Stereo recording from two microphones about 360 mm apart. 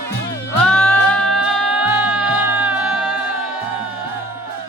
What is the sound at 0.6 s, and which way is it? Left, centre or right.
Music, centre.